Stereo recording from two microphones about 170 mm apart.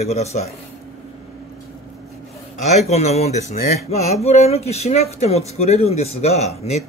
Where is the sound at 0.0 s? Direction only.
40° left (ahead or behind).